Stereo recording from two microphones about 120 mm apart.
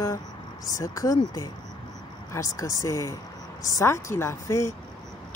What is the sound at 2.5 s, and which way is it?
Speech, 30° left (ahead or behind).